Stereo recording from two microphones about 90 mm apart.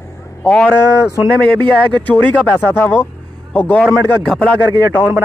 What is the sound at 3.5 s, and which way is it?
Speech, 20° left (ahead or behind).